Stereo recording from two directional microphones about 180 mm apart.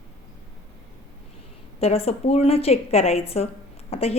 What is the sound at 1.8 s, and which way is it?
A woman's voice, 35° left (ahead or behind).